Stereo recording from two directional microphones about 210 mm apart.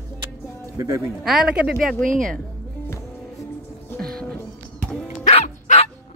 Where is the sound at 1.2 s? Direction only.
Centre (ahead or behind).